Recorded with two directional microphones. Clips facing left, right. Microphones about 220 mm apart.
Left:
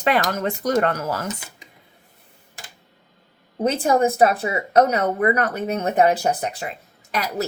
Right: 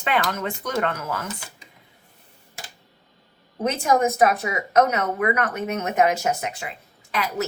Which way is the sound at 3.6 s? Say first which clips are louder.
Left 2 dB; 30° left (ahead or behind).